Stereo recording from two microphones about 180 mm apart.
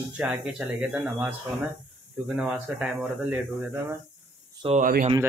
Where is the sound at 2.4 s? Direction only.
5° right (ahead or behind).